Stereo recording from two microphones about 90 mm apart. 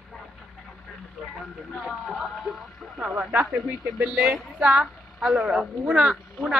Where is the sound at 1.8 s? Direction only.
5° right (ahead or behind).